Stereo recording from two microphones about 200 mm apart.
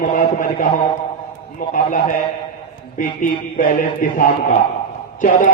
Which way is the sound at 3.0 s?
40° left (ahead or behind).